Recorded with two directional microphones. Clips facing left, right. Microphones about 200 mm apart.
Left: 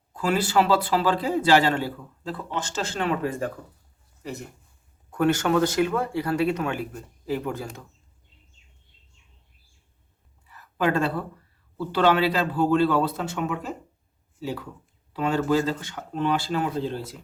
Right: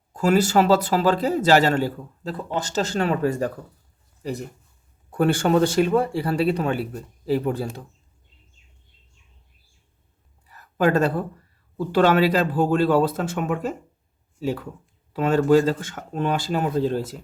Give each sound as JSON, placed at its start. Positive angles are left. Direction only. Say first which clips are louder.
{"t": 0.1, "sound": "speech", "louder": "right 5 dB", "side_deg": -45}
{"t": 10.4, "sound": "a sound", "louder": "right 4 dB", "side_deg": -40}
{"t": 11.8, "sound": "speech", "louder": "right 3 dB", "side_deg": -45}
{"t": 15.1, "sound": "speech", "louder": "right 5 dB", "side_deg": -45}